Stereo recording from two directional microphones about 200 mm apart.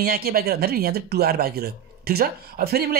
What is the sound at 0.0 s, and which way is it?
Speech, 50° right (ahead or behind).